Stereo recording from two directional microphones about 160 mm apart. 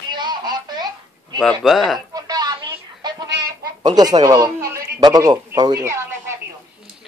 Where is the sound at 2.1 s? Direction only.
25° right (ahead or behind).